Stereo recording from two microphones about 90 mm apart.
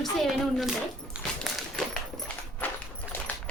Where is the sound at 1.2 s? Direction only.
15° right (ahead or behind).